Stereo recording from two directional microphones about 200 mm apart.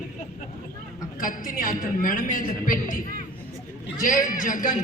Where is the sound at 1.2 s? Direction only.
40° left (ahead or behind).